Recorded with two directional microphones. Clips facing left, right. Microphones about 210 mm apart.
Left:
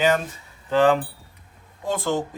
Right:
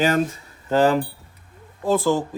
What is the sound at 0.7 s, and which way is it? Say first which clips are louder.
Speech: even; 40° right (ahead or behind).